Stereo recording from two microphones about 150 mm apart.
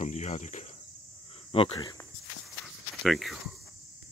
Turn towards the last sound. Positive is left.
turn(degrees=0)  # may be behind; listen again after turning